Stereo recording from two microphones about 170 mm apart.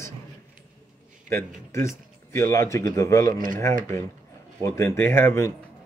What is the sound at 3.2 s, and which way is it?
Speech, 55° right (ahead or behind).